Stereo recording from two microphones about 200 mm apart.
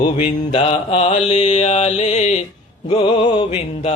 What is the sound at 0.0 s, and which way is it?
Mantra, 35° left (ahead or behind).